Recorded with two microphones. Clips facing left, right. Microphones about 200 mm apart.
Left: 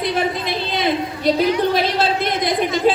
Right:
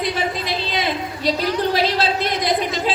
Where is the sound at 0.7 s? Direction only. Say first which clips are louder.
Left 3 dB; 55° left (ahead or behind).